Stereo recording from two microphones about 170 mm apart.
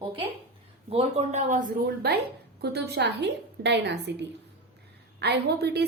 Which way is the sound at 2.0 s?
70° right (ahead or behind).